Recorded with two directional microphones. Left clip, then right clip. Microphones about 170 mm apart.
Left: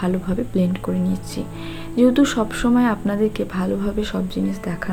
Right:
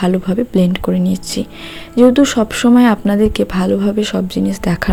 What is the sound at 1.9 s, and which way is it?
Speech, 35° right (ahead or behind).